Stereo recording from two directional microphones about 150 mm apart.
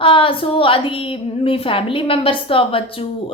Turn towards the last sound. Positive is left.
turn(degrees=35)  # may be behind; listen again after turning